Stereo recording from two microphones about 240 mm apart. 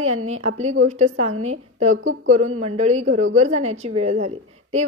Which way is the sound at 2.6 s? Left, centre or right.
Right.